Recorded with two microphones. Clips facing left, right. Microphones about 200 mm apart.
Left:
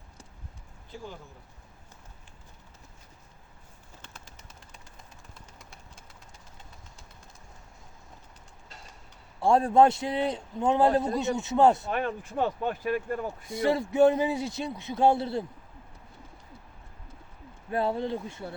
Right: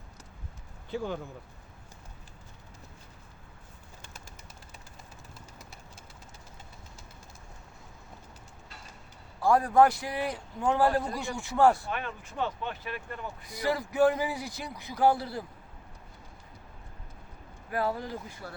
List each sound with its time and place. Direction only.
0.9 s speech: 70° right (ahead or behind)
4.0 s bird: 10° right (ahead or behind)
9.4 s a man's voice: 25° left (ahead or behind)
11.9 s speech: 40° left (ahead or behind)
13.5 s a man's voice: 25° left (ahead or behind)
17.7 s a man's voice: 25° left (ahead or behind)